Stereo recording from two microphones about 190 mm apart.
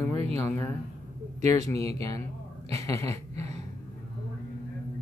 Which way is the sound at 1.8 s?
30° right (ahead or behind).